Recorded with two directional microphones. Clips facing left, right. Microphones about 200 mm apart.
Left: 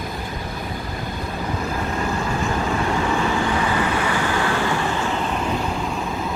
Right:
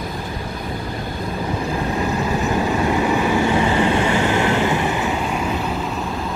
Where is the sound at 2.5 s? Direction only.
20° right (ahead or behind).